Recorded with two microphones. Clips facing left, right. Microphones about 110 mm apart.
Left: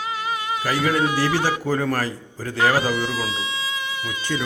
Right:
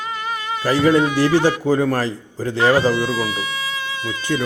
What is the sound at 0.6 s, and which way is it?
A man's voice, 25° right (ahead or behind).